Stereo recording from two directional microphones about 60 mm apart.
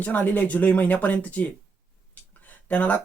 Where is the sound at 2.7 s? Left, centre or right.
Left.